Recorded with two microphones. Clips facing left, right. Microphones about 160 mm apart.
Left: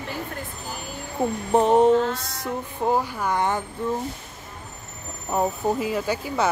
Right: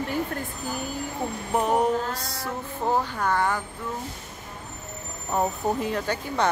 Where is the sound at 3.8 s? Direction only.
30° left (ahead or behind).